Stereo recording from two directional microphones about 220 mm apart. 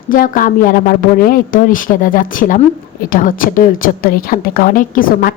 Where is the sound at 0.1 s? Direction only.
40° left (ahead or behind).